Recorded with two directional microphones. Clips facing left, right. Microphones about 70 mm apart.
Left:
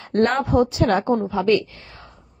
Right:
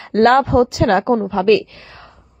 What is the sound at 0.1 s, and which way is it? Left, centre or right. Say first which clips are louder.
A woman's voice: right 6 dB; right.